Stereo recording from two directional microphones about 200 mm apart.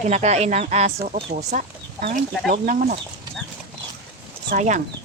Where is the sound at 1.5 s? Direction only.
40° right (ahead or behind).